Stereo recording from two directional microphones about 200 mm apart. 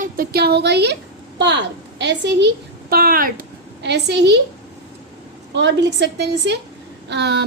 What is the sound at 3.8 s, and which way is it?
Speech, 60° right (ahead or behind).